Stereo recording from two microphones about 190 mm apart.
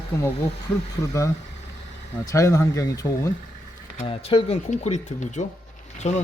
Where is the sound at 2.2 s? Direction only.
15° left (ahead or behind).